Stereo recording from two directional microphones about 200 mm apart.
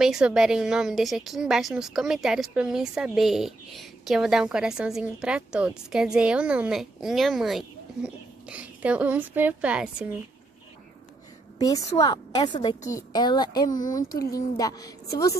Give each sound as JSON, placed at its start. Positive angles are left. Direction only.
{"t": 0.0, "sound": "a woman's voice", "side_deg": -5}
{"t": 11.5, "sound": "a sound", "side_deg": 20}
{"t": 12.0, "sound": "a woman's voice", "side_deg": 20}
{"t": 13.7, "sound": "speech", "side_deg": 40}
{"t": 14.3, "sound": "a woman's voice", "side_deg": 20}